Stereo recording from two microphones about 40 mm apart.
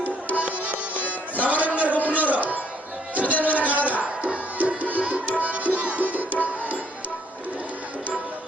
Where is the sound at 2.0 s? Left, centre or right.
Left.